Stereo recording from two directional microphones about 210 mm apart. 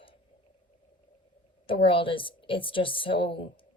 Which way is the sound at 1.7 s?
25° left (ahead or behind).